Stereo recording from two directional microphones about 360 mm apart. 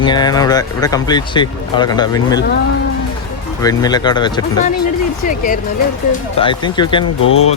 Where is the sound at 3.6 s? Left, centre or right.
Centre.